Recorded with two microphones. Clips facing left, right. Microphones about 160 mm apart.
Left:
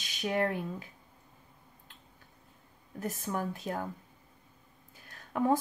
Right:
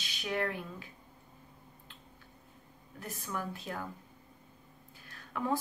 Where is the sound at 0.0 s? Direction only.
45° left (ahead or behind).